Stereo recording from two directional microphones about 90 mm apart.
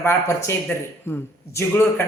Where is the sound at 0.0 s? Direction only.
30° left (ahead or behind).